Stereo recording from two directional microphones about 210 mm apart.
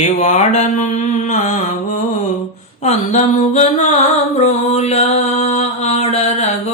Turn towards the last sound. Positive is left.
turn(degrees=30)  # may be behind; listen again after turning